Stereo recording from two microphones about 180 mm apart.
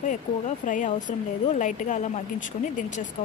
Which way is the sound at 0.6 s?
45° left (ahead or behind).